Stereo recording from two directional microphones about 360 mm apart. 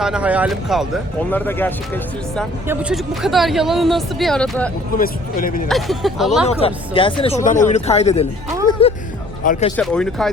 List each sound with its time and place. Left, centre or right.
0.0 s speech: centre
4.9 s speech: left
5.6 s speech: centre
6.5 s speech: centre
8.7 s music: centre
9.4 s speech: centre
9.7 s speech: centre